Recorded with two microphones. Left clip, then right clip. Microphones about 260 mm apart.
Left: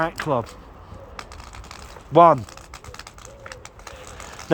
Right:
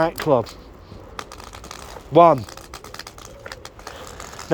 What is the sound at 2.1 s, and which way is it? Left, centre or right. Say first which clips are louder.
Speech: right 1 dB; centre.